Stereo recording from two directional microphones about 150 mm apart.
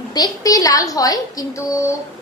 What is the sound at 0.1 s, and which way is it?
A woman's voice, 25° left (ahead or behind).